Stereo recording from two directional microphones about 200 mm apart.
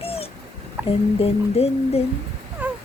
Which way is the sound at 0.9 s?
30° left (ahead or behind).